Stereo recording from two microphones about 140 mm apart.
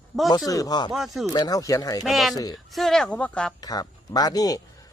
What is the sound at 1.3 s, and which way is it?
Speech, 25° left (ahead or behind).